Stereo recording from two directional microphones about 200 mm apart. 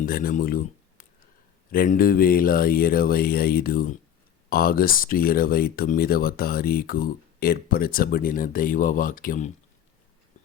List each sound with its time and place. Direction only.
0.0 s speech: 45° left (ahead or behind)